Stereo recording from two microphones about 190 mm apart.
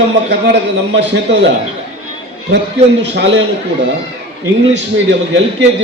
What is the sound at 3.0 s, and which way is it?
Speech, 65° right (ahead or behind).